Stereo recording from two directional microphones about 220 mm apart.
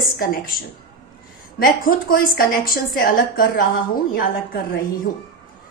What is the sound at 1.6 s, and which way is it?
A woman's voice, 40° left (ahead or behind).